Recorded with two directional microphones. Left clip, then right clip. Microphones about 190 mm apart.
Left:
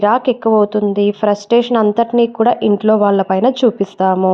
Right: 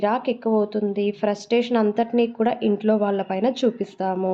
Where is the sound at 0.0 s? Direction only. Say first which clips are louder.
Left 9 dB; 35° left (ahead or behind).